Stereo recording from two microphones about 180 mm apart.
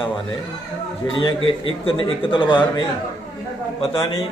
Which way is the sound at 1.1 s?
30° left (ahead or behind).